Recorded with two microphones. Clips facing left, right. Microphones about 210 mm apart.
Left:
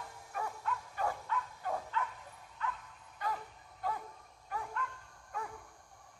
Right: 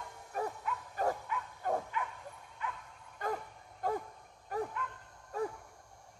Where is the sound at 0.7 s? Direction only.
5° right (ahead or behind).